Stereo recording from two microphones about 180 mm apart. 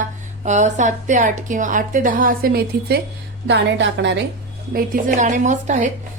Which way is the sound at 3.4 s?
75° right (ahead or behind).